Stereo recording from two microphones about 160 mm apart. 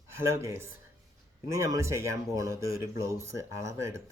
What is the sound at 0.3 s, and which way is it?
Speech, 15° right (ahead or behind).